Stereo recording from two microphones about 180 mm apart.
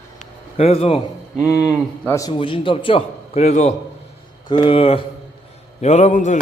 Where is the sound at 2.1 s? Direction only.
20° left (ahead or behind).